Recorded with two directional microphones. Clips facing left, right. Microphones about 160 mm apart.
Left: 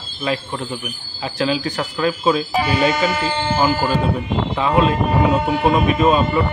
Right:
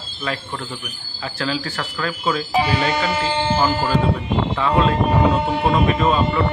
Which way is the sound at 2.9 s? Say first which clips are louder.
Left 1 dB; 25° right (ahead or behind).